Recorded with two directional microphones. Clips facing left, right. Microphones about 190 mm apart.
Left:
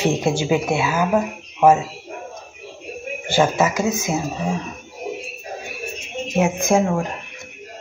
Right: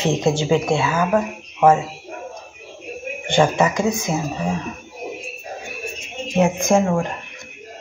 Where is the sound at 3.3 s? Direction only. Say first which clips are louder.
Right 1 dB; 5° left (ahead or behind).